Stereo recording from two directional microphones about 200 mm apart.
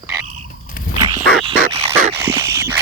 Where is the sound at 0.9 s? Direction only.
20° right (ahead or behind).